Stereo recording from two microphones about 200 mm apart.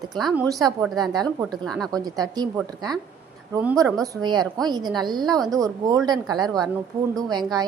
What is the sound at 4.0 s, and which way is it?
A woman's voice, 20° right (ahead or behind).